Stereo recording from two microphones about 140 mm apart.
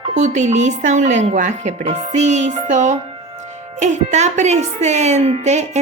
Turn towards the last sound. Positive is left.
turn(degrees=-50)  # may be behind; listen again after turning